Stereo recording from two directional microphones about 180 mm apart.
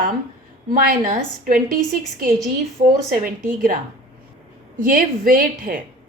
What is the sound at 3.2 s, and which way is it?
Speech, 50° right (ahead or behind).